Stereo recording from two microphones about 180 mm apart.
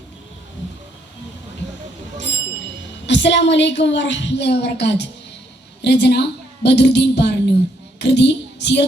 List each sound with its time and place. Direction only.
3.1 s a woman's voice: 80° left
7.9 s child singing: 70° left (ahead or behind)